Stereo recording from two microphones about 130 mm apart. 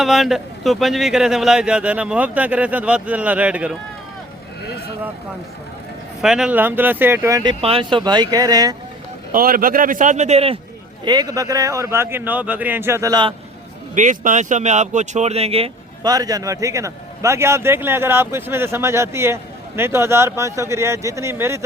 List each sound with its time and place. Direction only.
0.0 s speech: centre (ahead or behind)
6.2 s speech: 5° right (ahead or behind); by 7.5 s 25° right (ahead or behind)
7.6 s speech: 45° right (ahead or behind); by 8.7 s 30° right (ahead or behind)
9.3 s a man's voice: 90° right; by 10.6 s 50° right (ahead or behind)
11.0 s a man's voice: 30° right (ahead or behind)
13.9 s speech: 80° right; by 15.7 s 50° right (ahead or behind)
16.0 s a man's voice: 30° right (ahead or behind)